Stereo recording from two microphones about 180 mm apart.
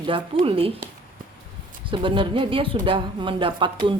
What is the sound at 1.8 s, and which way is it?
Speech, 30° right (ahead or behind).